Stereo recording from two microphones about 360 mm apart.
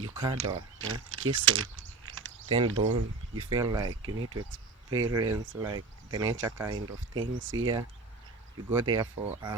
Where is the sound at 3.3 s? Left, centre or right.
Centre.